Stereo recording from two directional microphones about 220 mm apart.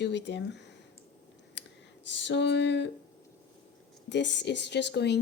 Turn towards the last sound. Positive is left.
turn(degrees=50)  # may be behind; listen again after turning